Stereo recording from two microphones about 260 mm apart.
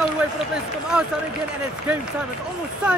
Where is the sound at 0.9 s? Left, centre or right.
Centre.